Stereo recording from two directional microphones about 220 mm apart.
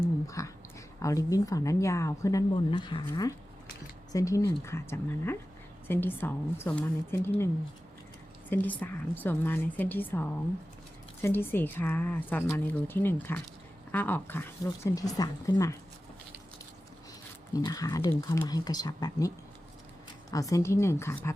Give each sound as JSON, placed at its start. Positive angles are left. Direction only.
{"t": 0.3, "sound": "a woman's voice", "side_deg": 15}
{"t": 17.5, "sound": "a woman's voice", "side_deg": 15}
{"t": 20.3, "sound": "a woman's voice", "side_deg": 15}